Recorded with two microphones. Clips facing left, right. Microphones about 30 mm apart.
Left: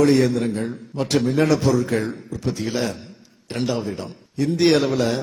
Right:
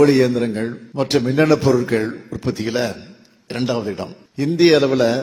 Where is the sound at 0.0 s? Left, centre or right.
Centre.